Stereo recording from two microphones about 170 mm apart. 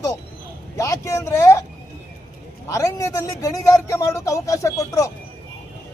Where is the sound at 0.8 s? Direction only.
20° left (ahead or behind).